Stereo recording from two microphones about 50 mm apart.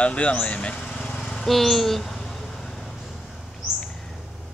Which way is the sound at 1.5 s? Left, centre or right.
Centre.